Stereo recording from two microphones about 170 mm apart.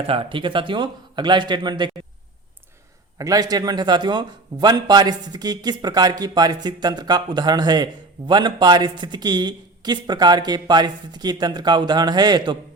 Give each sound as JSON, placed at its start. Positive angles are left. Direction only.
{"t": 0.1, "sound": "a man's voice", "side_deg": -30}
{"t": 3.2, "sound": "a man's voice", "side_deg": -20}